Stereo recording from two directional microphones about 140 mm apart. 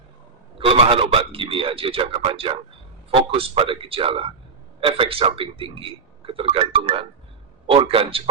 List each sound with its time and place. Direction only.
0.6 s a man's voice: 45° right (ahead or behind)